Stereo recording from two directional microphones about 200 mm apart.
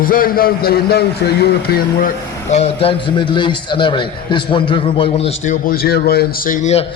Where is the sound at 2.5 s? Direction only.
30° left (ahead or behind).